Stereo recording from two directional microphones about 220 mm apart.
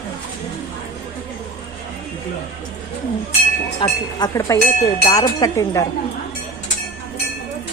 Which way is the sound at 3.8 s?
20° left (ahead or behind).